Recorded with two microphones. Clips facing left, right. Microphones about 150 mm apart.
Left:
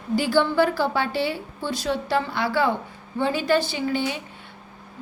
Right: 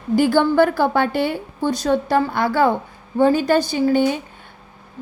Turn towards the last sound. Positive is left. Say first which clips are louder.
# right 8 dB
turn(degrees=-45)  # may be behind; listen again after turning